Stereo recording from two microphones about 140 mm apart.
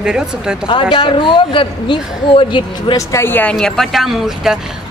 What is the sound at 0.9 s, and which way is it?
A man's voice, 35° left (ahead or behind).